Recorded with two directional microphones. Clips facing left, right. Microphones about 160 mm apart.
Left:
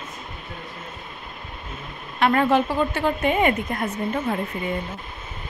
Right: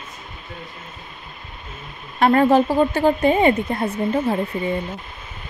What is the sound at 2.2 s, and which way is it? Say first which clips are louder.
Speech: right 4 dB; 40° right (ahead or behind).